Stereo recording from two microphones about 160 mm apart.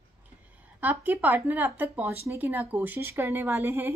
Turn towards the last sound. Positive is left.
turn(degrees=-15)  # may be behind; listen again after turning